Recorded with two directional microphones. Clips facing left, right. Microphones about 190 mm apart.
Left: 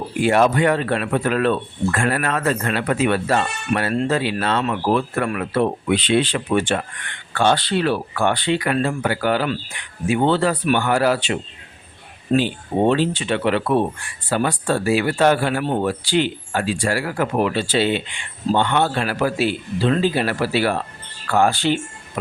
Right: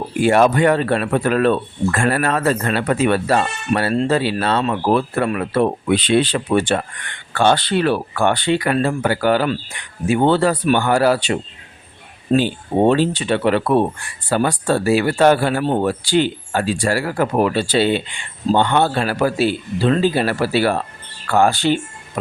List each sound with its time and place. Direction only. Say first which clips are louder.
0.2 s speech: right 3 dB; 45° right (ahead or behind)
5.2 s speech: right 3 dB; 25° right (ahead or behind)
5.5 s speech: right 2 dB; 40° right (ahead or behind)
7.3 s speech: right 2 dB; 55° right (ahead or behind)